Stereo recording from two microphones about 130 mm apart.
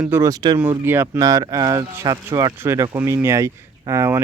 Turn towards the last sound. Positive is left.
turn(degrees=-20)  # may be behind; listen again after turning